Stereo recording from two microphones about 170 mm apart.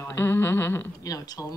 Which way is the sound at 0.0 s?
15° left (ahead or behind).